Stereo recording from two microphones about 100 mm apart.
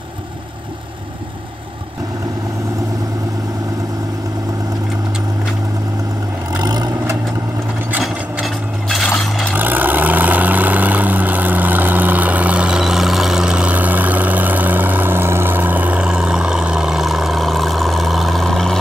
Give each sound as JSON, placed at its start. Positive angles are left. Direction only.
{"t": 6.6, "sound": "vehicle", "side_deg": -40}
{"t": 8.0, "sound": "a sound", "side_deg": 0}
{"t": 9.5, "sound": "vehicle", "side_deg": -15}